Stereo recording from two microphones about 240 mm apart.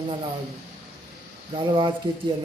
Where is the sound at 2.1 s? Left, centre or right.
Right.